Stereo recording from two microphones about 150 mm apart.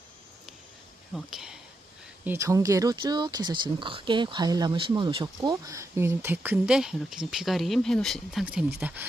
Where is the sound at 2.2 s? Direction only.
15° right (ahead or behind).